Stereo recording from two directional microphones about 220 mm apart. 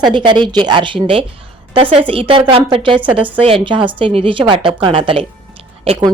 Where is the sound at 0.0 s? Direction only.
20° right (ahead or behind).